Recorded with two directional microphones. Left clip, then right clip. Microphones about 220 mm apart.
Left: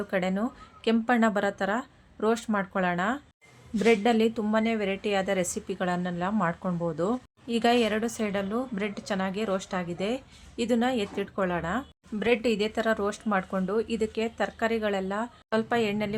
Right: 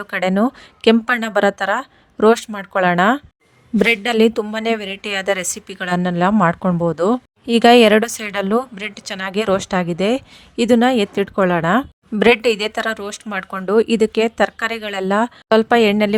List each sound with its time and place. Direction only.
0.0 s a woman's voice: 45° right (ahead or behind)